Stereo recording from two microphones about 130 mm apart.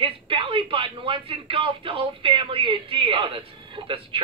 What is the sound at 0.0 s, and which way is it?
Speech, 45° right (ahead or behind).